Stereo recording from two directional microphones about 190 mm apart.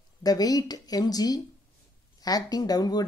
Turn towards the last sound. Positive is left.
turn(degrees=20)  # may be behind; listen again after turning